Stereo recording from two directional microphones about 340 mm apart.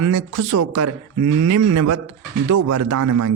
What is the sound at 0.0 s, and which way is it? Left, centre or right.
Speech, right.